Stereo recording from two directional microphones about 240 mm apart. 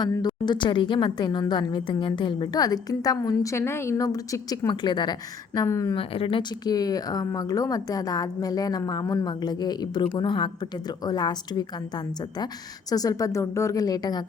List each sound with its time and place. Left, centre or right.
0.0 s a woman's voice: centre
12.9 s a woman's voice: centre